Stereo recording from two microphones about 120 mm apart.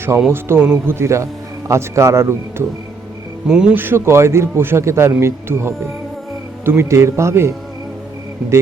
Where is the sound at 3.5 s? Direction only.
5° right (ahead or behind).